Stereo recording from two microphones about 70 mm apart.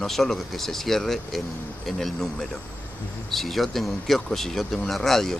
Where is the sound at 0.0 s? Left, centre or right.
Centre.